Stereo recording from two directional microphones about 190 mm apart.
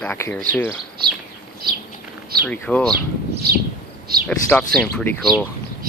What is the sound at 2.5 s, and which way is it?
Speech, 5° left (ahead or behind).